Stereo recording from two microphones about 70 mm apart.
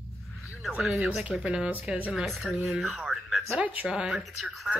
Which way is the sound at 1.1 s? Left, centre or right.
Centre.